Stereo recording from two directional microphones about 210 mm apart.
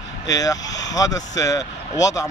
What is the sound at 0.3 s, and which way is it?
A man's voice, 15° left (ahead or behind).